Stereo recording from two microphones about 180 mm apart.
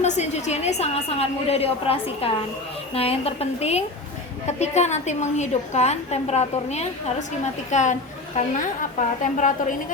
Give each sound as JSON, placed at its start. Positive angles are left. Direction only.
{"t": 0.0, "sound": "a woman's voice", "side_deg": 40}